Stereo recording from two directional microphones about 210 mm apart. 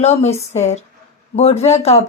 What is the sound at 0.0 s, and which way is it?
Speech, 30° left (ahead or behind).